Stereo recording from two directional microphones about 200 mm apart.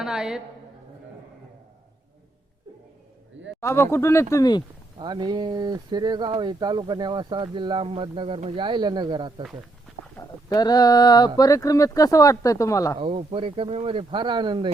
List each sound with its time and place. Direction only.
0.0 s a woman's voice: centre (ahead or behind)
3.6 s speech: 15° left (ahead or behind)
4.9 s speech: 20° right (ahead or behind)
10.2 s speech: 20° left (ahead or behind)
13.0 s speech: 30° right (ahead or behind)